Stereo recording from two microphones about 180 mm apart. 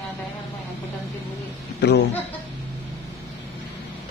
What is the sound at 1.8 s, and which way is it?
Speech, 70° left (ahead or behind).